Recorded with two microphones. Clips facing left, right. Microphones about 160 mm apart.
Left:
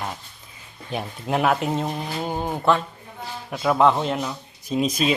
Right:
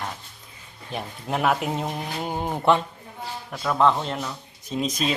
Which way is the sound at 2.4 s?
20° right (ahead or behind).